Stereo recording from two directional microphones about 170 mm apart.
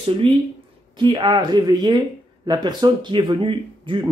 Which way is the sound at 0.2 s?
30° right (ahead or behind).